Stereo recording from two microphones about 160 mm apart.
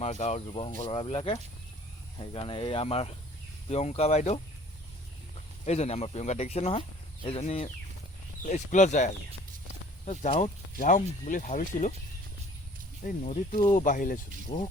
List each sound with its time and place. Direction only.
0.0 s speech: 40° left (ahead or behind)
5.6 s speech: 45° left (ahead or behind)
13.0 s speech: 50° left (ahead or behind)